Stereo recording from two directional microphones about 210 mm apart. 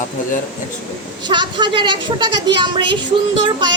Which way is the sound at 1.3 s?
20° right (ahead or behind).